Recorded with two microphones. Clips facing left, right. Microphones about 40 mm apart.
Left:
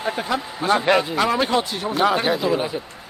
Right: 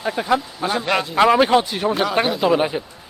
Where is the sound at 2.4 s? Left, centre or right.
Right.